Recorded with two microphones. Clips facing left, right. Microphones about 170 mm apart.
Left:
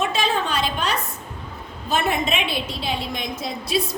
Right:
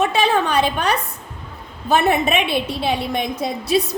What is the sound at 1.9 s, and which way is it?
A woman's voice, 60° right (ahead or behind).